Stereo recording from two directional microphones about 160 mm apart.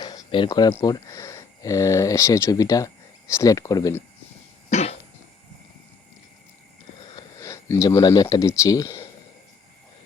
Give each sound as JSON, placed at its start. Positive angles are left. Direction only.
{"t": 0.0, "sound": "a sound", "side_deg": 25}
{"t": 0.7, "sound": "speech", "side_deg": 20}
{"t": 4.7, "sound": "cough", "side_deg": 45}
{"t": 7.2, "sound": "speech", "side_deg": 20}